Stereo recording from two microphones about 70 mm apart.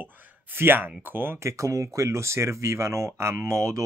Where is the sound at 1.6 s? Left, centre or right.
Right.